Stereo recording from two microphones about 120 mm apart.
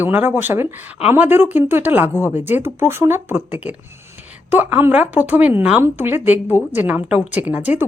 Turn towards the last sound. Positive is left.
turn(degrees=-15)  # may be behind; listen again after turning